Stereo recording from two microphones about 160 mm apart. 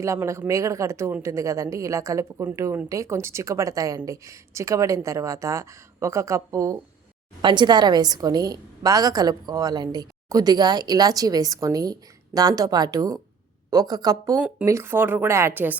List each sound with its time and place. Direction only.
0.0 s a woman's voice: 20° right (ahead or behind)